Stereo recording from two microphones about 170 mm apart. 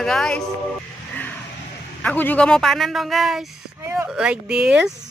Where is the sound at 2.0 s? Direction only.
10° left (ahead or behind).